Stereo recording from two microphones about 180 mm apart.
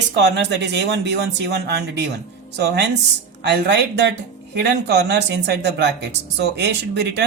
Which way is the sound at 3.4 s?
70° right (ahead or behind).